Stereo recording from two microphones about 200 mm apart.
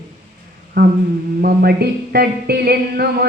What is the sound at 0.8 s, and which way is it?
A woman's voice, 45° right (ahead or behind).